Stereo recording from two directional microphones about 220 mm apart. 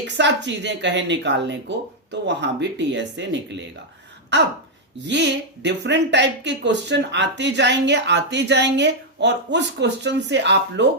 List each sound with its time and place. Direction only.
0.0 s a woman's voice: 50° right (ahead or behind)